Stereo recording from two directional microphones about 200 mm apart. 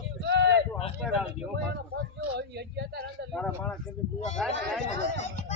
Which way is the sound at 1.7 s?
55° right (ahead or behind).